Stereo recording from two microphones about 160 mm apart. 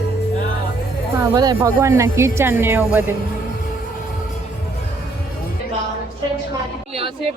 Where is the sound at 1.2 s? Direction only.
20° right (ahead or behind).